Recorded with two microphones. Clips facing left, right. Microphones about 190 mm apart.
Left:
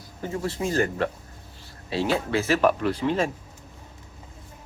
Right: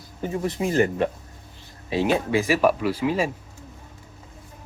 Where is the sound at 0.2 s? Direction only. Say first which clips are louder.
Right 3 dB; 15° right (ahead or behind).